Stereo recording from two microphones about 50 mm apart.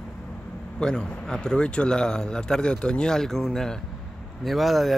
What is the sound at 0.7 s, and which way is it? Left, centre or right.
Speech, centre.